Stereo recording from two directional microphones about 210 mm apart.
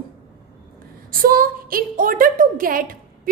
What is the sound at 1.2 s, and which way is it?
A woman's voice, 45° right (ahead or behind).